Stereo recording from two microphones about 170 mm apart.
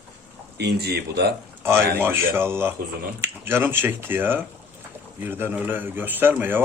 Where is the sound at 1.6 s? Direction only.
15° right (ahead or behind).